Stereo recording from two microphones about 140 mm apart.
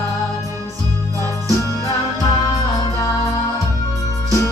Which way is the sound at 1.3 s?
25° left (ahead or behind).